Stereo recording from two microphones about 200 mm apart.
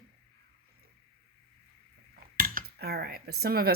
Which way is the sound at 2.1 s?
45° right (ahead or behind).